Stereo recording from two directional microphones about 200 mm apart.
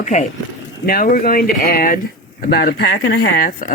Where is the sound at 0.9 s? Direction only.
45° left (ahead or behind).